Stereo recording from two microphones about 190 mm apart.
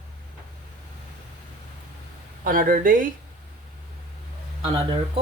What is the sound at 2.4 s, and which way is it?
Speech, 45° right (ahead or behind).